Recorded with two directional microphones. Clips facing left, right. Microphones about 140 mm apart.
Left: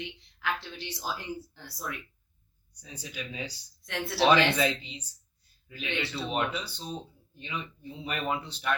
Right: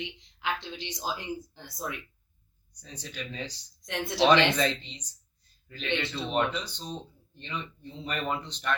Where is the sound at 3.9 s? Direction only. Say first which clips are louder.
Right 1 dB; 20° right (ahead or behind).